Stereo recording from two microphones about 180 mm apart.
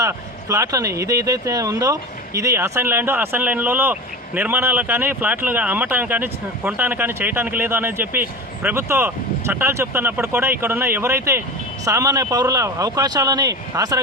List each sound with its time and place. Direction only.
0.0 s speech: 15° right (ahead or behind)